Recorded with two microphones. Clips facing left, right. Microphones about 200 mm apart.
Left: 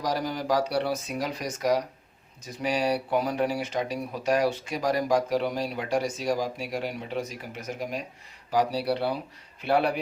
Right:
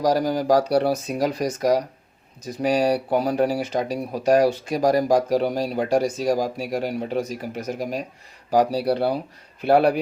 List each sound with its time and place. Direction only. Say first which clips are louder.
0.0 s speech: right 8 dB; 40° right (ahead or behind)